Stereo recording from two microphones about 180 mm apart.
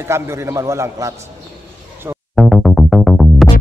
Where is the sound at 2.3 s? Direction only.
Centre (ahead or behind).